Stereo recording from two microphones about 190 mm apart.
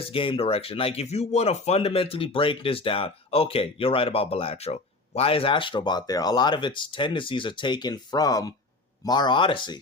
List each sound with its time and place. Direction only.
0.0 s speech: 30° left (ahead or behind)